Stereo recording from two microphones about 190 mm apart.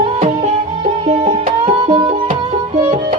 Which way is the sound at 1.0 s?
30° right (ahead or behind).